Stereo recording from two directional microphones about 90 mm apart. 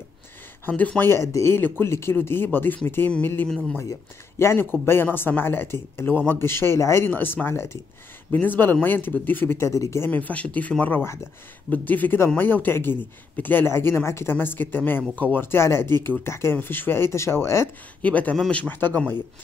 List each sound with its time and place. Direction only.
0.7 s speech: 20° left (ahead or behind)
1.1 s speech: 30° left (ahead or behind)
3.4 s speech: 5° left (ahead or behind)
4.4 s speech: 30° left (ahead or behind)
7.1 s speech: 20° left (ahead or behind)
18.0 s speech: 15° left (ahead or behind)